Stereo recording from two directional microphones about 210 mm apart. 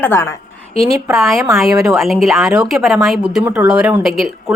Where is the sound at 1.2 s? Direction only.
Centre (ahead or behind).